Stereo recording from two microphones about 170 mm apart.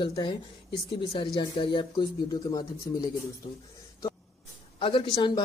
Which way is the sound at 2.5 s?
20° left (ahead or behind).